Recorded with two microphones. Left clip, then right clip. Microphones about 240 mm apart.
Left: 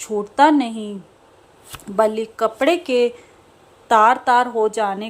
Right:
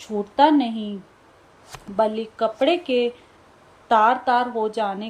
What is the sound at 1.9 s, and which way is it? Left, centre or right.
A woman's voice, centre.